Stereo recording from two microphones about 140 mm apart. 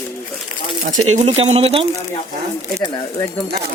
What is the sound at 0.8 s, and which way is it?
Speech, 60° right (ahead or behind).